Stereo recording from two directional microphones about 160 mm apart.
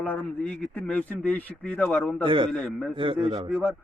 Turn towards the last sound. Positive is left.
turn(degrees=0)  # may be behind; listen again after turning